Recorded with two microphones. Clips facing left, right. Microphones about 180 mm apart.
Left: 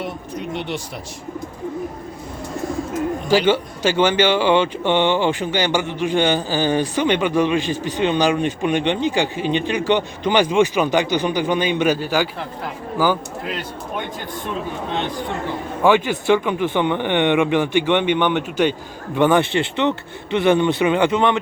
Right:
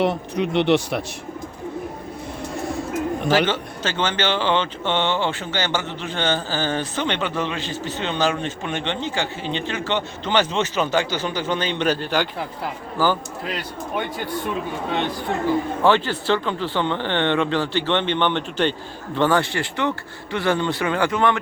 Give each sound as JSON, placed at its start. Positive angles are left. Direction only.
{"t": 0.0, "sound": "speech", "side_deg": -70}
{"t": 3.2, "sound": "speech", "side_deg": 10}
{"t": 15.8, "sound": "speech", "side_deg": 10}